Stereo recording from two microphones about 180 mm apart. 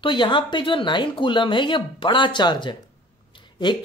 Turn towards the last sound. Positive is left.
turn(degrees=25)  # may be behind; listen again after turning